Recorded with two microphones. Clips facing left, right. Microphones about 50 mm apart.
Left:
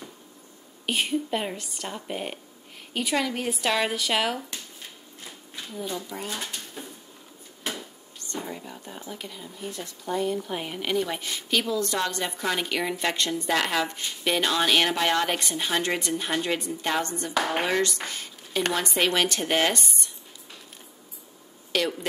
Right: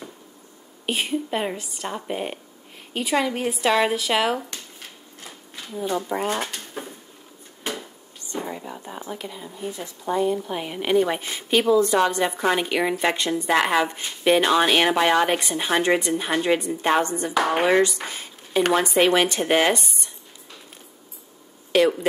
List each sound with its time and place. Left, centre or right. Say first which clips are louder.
0.8 s a woman's voice: right 1 dB; centre
5.9 s speech: right 11 dB; right
8.2 s a sound: right 4 dB; centre
9.2 s a woman's voice: right 5 dB; centre
10.8 s a woman's voice: right 8 dB; centre
13.5 s a woman's voice: right 6 dB; right
17.8 s a woman's voice: right 3 dB; centre
21.7 s a woman's voice: right 8 dB; centre